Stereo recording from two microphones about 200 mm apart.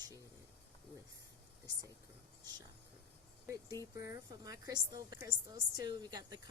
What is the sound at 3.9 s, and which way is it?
A woman's voice, 15° right (ahead or behind).